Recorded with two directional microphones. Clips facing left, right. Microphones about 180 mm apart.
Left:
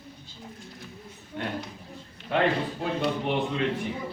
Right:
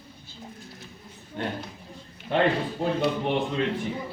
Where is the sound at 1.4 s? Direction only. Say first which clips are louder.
Right 2 dB; 35° right (ahead or behind).